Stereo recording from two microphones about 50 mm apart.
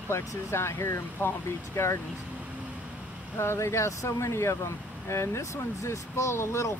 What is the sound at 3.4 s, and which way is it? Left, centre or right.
Speech, left.